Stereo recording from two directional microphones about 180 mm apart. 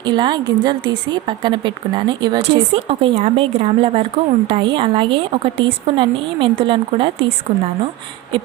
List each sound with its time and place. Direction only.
0.0 s speech: 25° right (ahead or behind)